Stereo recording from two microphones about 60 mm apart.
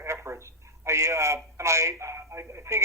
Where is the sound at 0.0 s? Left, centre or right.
Right.